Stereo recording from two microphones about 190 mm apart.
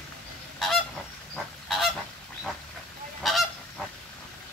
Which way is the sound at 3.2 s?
Centre (ahead or behind).